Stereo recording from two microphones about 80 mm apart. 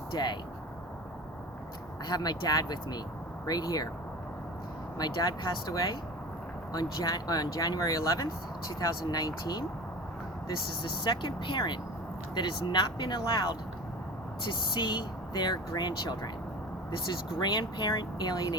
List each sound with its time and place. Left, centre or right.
0.1 s speech: left
2.0 s speech: left
4.9 s speech: left
6.7 s speech: left
10.8 s speech: left
14.4 s speech: left